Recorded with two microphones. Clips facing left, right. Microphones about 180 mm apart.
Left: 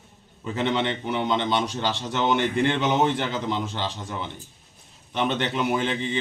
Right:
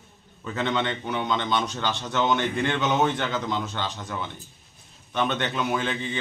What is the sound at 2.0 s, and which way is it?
Speech, 10° left (ahead or behind).